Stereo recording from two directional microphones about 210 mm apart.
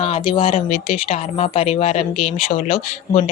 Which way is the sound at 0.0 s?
25° left (ahead or behind).